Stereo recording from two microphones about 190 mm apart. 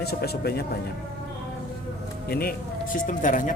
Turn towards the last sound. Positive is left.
turn(degrees=45)  # may be behind; listen again after turning